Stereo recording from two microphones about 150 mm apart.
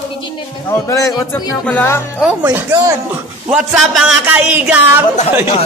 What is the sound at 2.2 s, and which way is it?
Speech, 10° right (ahead or behind).